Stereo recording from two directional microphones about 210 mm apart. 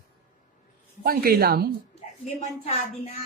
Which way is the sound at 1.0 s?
45° right (ahead or behind).